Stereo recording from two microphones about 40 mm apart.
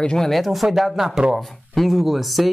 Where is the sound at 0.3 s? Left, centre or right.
Centre.